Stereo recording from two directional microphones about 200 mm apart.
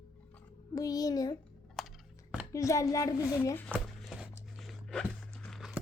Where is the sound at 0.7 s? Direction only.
15° left (ahead or behind).